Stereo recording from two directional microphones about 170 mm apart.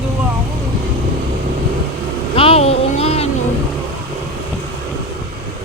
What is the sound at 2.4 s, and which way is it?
Music, 35° left (ahead or behind).